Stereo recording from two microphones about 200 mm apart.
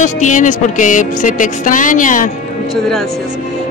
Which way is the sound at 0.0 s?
40° left (ahead or behind).